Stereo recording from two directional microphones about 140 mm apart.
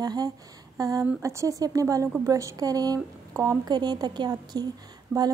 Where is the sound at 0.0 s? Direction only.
30° right (ahead or behind).